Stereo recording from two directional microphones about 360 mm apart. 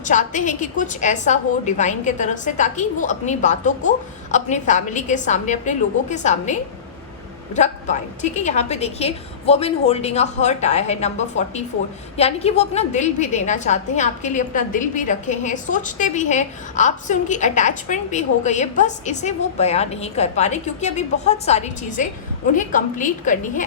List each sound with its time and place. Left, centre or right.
0.0 s a woman's voice: centre